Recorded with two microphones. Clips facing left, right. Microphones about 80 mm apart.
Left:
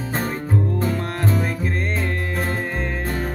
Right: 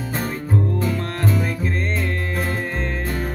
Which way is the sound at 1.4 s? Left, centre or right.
Centre.